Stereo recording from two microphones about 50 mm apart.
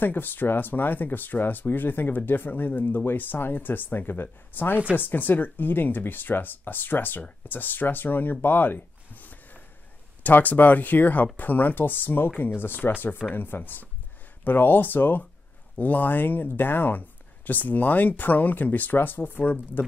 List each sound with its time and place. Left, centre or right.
0.0 s speech: left